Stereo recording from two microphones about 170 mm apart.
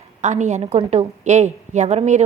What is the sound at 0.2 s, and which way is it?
A woman's voice, 45° right (ahead or behind).